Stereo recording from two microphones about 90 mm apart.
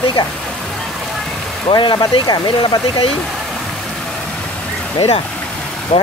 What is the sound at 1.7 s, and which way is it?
Speech, 55° left (ahead or behind).